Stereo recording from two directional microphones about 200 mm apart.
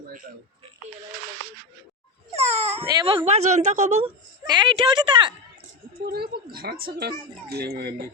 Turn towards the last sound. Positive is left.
turn(degrees=-50)  # may be behind; listen again after turning